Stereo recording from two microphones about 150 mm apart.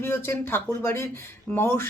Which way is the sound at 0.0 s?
15° left (ahead or behind).